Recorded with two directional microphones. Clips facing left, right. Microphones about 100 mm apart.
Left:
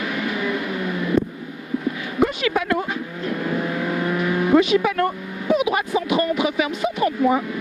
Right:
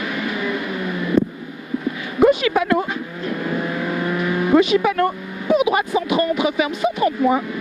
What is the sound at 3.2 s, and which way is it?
Vehicle, 20° right (ahead or behind).